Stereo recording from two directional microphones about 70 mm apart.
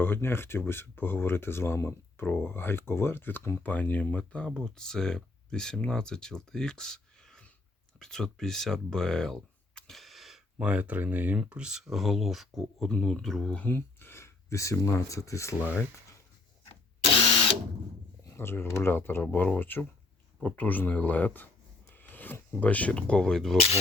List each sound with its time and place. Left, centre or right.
0.0 s speech: left; by 10.4 s centre
10.6 s speech: centre
11.3 s speech: centre
12.9 s speech: centre
13.7 s speech: left
18.3 s speech: left; by 23.6 s centre